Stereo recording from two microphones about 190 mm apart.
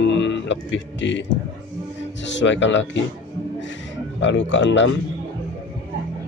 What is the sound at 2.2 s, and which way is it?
Speech, 75° left (ahead or behind).